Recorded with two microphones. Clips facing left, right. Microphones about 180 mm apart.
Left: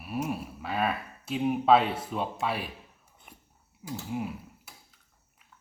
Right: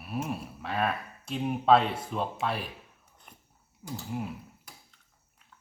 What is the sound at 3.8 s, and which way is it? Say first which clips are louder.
Typing: left 2 dB; 5° left (ahead or behind).